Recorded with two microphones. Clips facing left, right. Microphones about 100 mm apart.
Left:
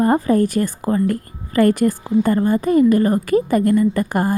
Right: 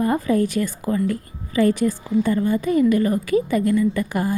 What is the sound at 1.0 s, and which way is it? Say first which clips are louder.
A woman's voice: left 3 dB; 55° left (ahead or behind).